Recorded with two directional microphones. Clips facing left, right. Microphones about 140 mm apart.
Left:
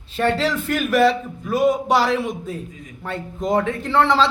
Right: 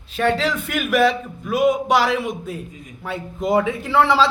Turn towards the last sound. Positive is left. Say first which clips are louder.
# right 1 dB
turn(degrees=-10)  # may be behind; listen again after turning